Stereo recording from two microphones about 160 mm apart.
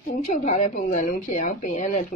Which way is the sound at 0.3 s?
45° left (ahead or behind).